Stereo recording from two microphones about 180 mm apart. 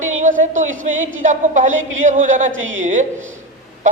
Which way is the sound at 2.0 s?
45° right (ahead or behind).